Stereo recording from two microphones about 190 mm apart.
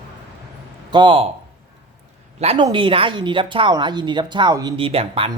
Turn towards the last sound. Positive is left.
turn(degrees=-30)  # may be behind; listen again after turning